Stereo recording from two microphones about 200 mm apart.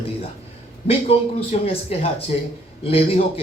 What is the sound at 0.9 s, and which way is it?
A man's voice, 30° left (ahead or behind).